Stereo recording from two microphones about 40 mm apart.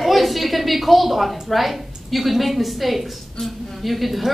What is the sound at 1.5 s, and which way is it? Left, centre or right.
A woman's voice, centre.